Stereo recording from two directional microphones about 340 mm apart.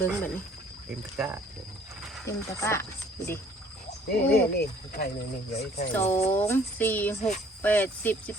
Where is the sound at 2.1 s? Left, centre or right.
Centre.